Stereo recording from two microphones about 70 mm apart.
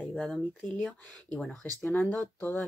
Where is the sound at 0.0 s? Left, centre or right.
Centre.